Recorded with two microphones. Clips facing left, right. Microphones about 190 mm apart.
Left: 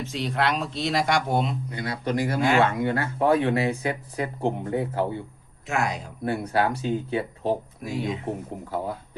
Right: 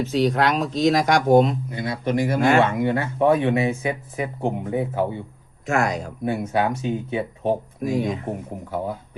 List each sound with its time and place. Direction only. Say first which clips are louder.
0.1 s speech: right 5 dB; 40° right (ahead or behind)
1.7 s a man's voice: right 3 dB; 25° right (ahead or behind)
2.4 s speech: right 3 dB; 50° right (ahead or behind)
2.7 s speech: right 3 dB; 20° right (ahead or behind)
5.6 s speech: right 5 dB; 45° right (ahead or behind)
6.2 s speech: right 2 dB; 20° right (ahead or behind)
8.0 s speech: right 3 dB; 50° right (ahead or behind)